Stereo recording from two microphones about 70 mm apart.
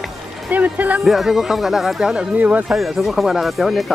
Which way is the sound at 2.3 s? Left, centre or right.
Right.